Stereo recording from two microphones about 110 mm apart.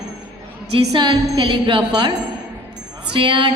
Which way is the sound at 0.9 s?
40° right (ahead or behind).